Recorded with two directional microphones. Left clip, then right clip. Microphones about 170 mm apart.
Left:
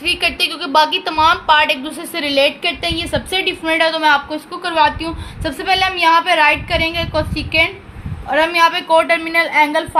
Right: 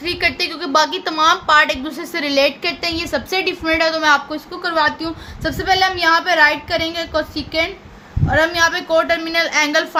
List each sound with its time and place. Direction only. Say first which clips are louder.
0.0 s a woman's voice: left 2 dB; 30° right (ahead or behind)